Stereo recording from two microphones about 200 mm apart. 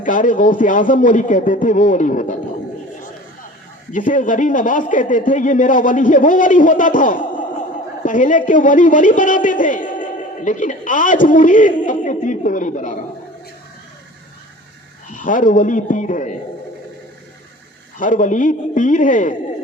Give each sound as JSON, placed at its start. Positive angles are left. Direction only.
{"t": 0.0, "sound": "a man's voice", "side_deg": 40}
{"t": 3.9, "sound": "a man's voice", "side_deg": 40}
{"t": 15.1, "sound": "a man's voice", "side_deg": 40}
{"t": 17.9, "sound": "a man's voice", "side_deg": 40}